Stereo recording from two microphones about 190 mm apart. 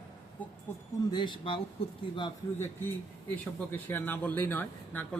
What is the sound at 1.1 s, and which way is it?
Speech, 25° left (ahead or behind).